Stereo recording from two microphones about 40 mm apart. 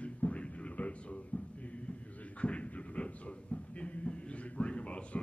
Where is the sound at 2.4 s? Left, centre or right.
Left.